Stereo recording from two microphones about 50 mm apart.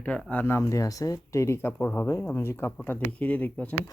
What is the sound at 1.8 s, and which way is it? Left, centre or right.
Speech, left.